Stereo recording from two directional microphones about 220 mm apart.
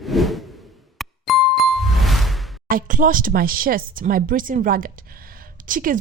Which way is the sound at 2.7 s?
40° right (ahead or behind).